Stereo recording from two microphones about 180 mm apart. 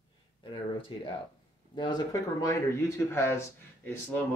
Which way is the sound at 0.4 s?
30° left (ahead or behind).